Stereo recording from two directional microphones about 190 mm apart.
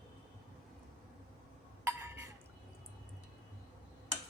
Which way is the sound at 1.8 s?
10° right (ahead or behind).